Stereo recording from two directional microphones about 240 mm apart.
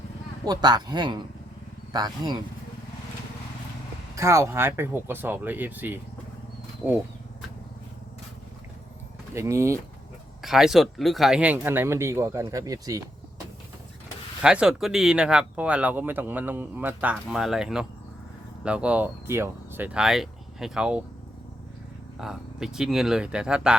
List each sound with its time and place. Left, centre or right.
0.4 s speech: centre
4.1 s speech: centre
9.3 s speech: centre
10.4 s speech: centre
14.4 s speech: centre
22.2 s speech: centre